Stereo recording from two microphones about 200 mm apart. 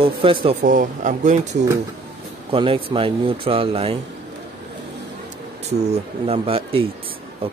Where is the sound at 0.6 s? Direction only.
40° right (ahead or behind).